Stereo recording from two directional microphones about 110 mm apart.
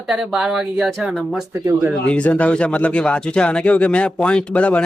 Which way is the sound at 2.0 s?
10° left (ahead or behind).